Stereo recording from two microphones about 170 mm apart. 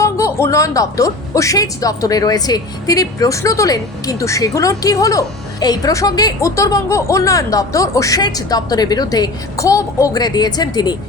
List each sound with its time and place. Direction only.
0.0 s a woman's voice: 15° left (ahead or behind)